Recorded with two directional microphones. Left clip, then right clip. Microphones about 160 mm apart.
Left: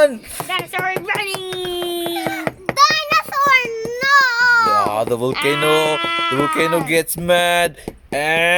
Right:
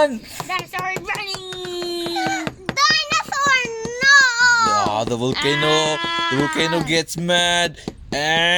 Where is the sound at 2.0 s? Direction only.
30° right (ahead or behind).